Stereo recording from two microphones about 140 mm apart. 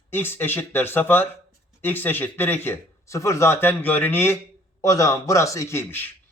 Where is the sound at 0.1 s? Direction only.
15° left (ahead or behind).